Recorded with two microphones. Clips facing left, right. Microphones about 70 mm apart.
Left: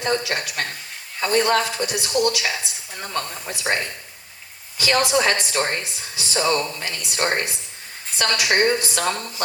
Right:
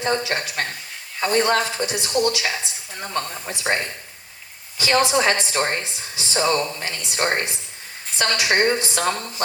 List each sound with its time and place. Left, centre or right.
0.0 s speech: right